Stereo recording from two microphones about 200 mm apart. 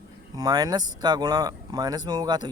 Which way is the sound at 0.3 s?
20° right (ahead or behind).